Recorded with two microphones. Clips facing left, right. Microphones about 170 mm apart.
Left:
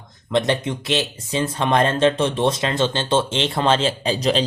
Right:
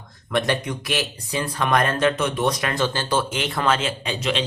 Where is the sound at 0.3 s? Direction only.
25° left (ahead or behind).